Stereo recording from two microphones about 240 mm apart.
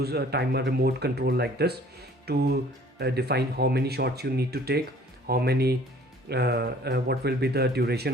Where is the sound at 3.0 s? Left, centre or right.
Right.